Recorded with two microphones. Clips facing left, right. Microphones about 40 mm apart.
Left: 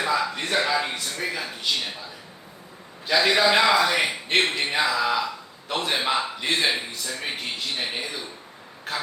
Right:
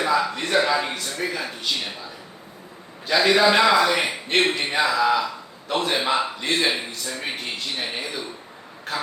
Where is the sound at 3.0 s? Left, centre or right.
Centre.